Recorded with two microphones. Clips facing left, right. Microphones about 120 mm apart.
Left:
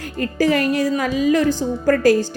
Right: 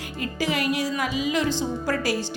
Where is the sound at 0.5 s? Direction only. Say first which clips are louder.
Left 6 dB; 15° right (ahead or behind).